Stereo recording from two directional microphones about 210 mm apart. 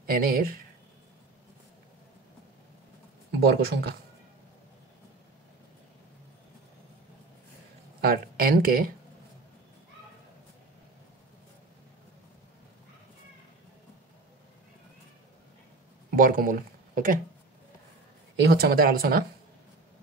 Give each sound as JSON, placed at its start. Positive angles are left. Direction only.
{"t": 0.0, "sound": "speech", "side_deg": -45}
{"t": 3.3, "sound": "speech", "side_deg": -50}
{"t": 8.0, "sound": "speech", "side_deg": -45}
{"t": 16.2, "sound": "speech", "side_deg": -40}
{"t": 18.5, "sound": "speech", "side_deg": -45}